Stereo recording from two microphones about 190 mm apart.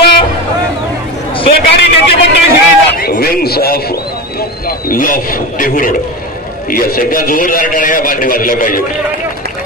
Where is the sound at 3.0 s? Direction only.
55° left (ahead or behind).